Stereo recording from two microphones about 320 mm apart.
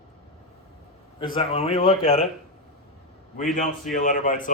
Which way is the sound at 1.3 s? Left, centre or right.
Centre.